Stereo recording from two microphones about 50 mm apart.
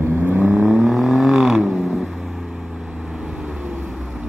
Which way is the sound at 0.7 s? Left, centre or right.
Centre.